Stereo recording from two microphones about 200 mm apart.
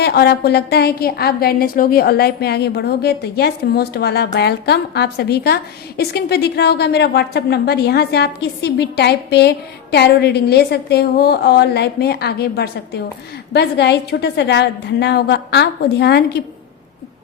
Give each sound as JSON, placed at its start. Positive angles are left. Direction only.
{"t": 0.0, "sound": "a woman's voice", "side_deg": 55}